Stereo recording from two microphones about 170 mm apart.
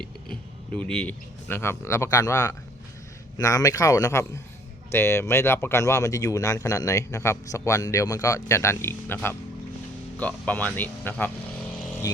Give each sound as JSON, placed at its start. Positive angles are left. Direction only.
{"t": 0.0, "sound": "speech", "side_deg": 5}